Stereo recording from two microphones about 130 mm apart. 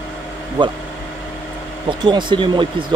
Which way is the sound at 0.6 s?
35° right (ahead or behind).